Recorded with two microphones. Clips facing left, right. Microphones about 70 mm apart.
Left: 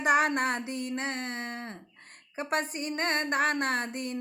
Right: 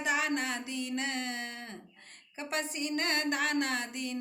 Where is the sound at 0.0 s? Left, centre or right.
Left.